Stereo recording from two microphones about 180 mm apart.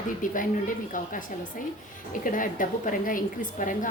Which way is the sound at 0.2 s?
50° left (ahead or behind).